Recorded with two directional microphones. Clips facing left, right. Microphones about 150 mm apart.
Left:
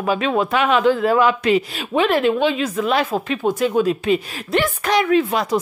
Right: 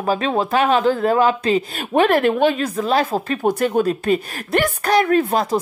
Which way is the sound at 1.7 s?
50° right (ahead or behind).